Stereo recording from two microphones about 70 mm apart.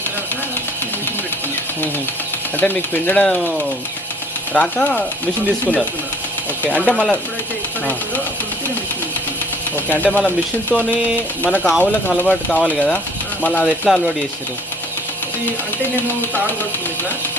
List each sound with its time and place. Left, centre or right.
2.6 s speech: left
4.5 s speech: centre
6.7 s speech: centre
9.7 s speech: left
13.9 s speech: centre